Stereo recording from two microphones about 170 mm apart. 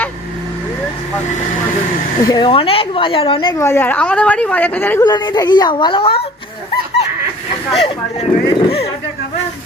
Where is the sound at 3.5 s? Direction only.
15° left (ahead or behind).